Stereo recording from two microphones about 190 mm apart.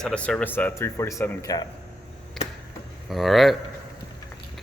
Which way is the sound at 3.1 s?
Centre (ahead or behind).